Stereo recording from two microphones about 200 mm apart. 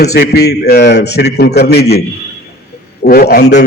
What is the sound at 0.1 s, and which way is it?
A man's voice, 55° left (ahead or behind).